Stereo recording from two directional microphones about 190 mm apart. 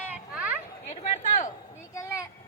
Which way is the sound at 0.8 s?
40° left (ahead or behind).